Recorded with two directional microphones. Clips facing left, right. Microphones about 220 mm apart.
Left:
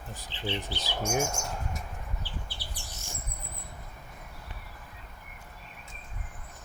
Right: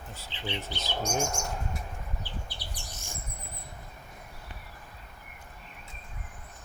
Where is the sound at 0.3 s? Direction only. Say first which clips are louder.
Left 2 dB; 20° right (ahead or behind).